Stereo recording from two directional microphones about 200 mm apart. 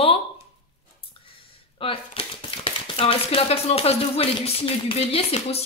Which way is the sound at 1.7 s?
25° left (ahead or behind).